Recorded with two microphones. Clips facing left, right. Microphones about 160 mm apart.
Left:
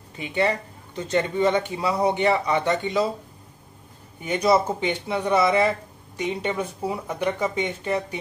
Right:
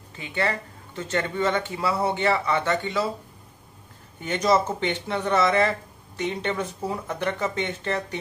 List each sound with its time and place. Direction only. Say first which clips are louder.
0.2 s speech: left 4 dB; 20° left (ahead or behind)
4.2 s speech: left 2 dB; 10° left (ahead or behind)